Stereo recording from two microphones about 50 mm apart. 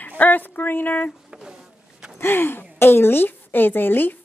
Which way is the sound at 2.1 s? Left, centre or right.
Left.